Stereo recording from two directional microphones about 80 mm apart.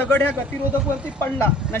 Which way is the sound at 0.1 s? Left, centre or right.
Left.